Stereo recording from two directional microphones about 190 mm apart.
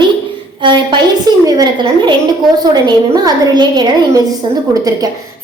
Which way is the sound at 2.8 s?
20° right (ahead or behind).